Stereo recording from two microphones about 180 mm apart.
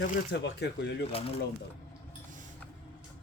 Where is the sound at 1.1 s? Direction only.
35° left (ahead or behind).